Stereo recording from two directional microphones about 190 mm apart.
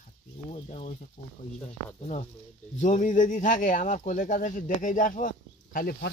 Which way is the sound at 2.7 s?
40° left (ahead or behind).